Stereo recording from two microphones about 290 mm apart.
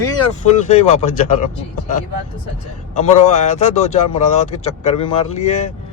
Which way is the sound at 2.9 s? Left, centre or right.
Left.